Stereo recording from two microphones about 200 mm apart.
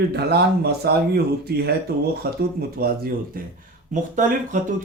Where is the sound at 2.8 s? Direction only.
50° right (ahead or behind).